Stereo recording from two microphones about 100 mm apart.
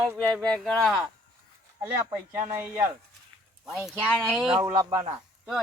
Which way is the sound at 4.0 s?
10° left (ahead or behind).